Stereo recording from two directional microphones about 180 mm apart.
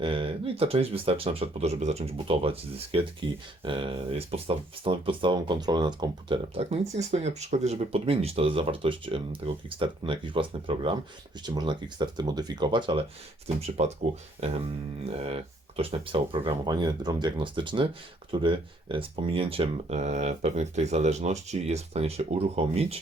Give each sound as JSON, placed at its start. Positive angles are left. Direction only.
{"t": 0.0, "sound": "speech", "side_deg": -30}